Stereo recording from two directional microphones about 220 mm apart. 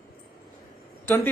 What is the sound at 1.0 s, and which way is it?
Speech, 10° left (ahead or behind).